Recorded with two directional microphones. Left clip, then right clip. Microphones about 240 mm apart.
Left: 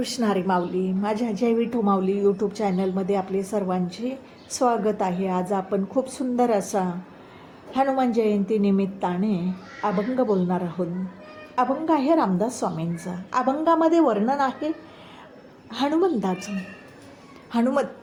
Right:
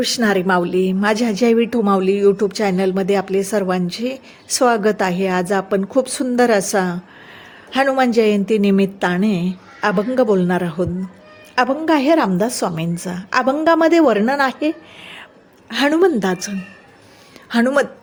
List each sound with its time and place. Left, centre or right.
0.0 s a woman's voice: right
15.7 s a woman's voice: right
17.5 s a woman's voice: right